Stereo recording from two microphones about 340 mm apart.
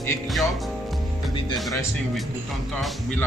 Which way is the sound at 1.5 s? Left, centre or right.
Centre.